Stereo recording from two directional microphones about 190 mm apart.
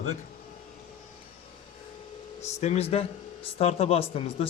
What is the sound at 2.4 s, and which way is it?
Speech, 35° left (ahead or behind).